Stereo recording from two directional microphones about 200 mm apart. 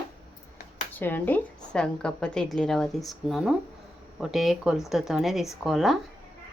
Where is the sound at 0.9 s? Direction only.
10° left (ahead or behind).